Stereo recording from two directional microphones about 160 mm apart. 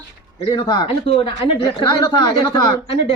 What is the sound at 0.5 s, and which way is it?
A woman's voice, 30° left (ahead or behind).